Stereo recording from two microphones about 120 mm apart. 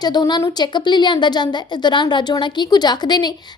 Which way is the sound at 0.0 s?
35° left (ahead or behind).